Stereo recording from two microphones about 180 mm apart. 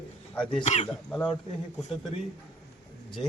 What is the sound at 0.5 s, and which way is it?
Speech, 40° left (ahead or behind).